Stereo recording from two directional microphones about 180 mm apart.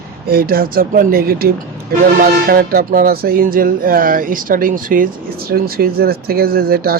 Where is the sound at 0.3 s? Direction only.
55° right (ahead or behind).